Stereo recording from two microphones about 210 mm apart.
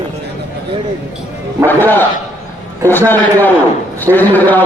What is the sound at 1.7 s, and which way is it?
A man's voice, 10° left (ahead or behind).